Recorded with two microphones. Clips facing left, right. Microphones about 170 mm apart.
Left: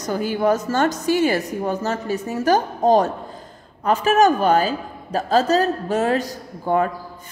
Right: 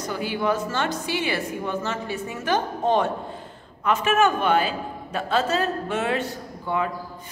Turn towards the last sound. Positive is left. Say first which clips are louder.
# left 6 dB
turn(degrees=45)  # may be behind; listen again after turning